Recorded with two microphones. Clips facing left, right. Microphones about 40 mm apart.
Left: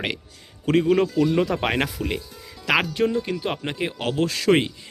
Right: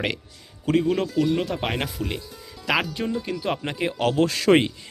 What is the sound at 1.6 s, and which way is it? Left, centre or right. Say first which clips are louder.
Speech: left 4 dB; left.